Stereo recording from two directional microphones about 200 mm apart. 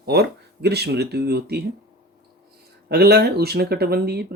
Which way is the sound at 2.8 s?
55° right (ahead or behind).